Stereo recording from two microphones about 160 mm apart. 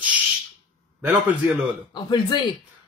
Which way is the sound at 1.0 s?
10° right (ahead or behind).